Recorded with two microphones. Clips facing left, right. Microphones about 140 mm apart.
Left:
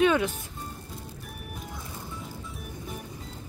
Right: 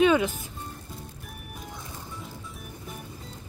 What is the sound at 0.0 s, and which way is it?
Music, centre (ahead or behind).